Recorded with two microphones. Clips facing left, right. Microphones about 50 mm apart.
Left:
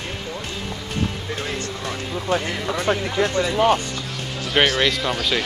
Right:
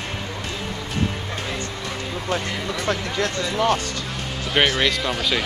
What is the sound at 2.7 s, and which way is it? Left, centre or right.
Speech, centre.